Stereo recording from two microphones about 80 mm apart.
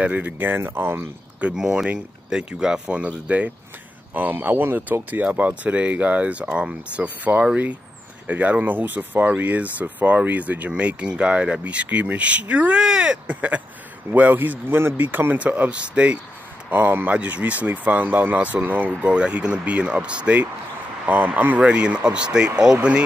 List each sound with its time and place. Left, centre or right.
0.0 s speech: centre
1.4 s speech: centre
16.7 s speech: right
21.5 s speech: centre